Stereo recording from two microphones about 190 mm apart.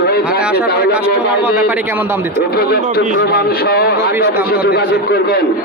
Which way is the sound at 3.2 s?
55° left (ahead or behind).